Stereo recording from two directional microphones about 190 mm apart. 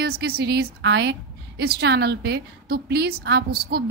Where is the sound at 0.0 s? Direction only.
55° right (ahead or behind).